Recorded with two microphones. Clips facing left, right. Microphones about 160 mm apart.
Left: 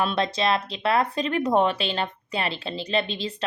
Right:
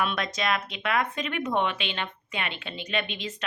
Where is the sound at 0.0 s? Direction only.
30° left (ahead or behind).